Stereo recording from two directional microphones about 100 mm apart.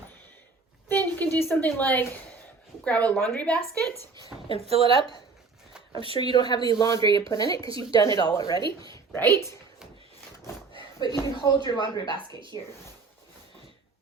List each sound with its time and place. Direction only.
0.9 s a sound: 15° left (ahead or behind)
1.4 s a woman's voice: 20° left (ahead or behind)
4.6 s a woman's voice: 85° right
6.1 s speech: 50° left (ahead or behind)
8.6 s speech: 50° right (ahead or behind)
9.1 s a woman's voice: 30° left (ahead or behind)
10.8 s a sound: 45° left (ahead or behind)
11.4 s speech: 45° left (ahead or behind)
12.1 s speech: 55° right (ahead or behind)